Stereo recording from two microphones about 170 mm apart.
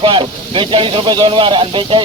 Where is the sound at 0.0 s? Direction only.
30° right (ahead or behind).